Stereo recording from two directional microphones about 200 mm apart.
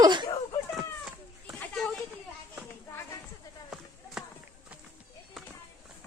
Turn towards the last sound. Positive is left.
turn(degrees=0)  # may be behind; listen again after turning